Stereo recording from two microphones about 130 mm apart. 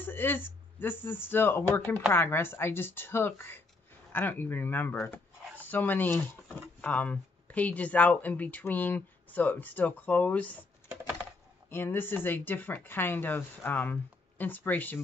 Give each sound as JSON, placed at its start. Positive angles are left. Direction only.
{"t": 0.0, "sound": "speech", "side_deg": 15}
{"t": 11.7, "sound": "speech", "side_deg": 15}